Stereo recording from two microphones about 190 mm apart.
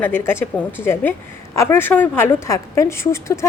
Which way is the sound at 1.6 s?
10° left (ahead or behind).